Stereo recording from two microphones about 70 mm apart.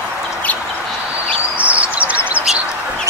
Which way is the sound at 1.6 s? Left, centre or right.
Centre.